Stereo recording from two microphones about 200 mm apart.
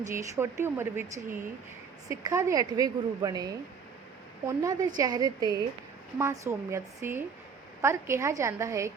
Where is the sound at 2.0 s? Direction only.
15° right (ahead or behind).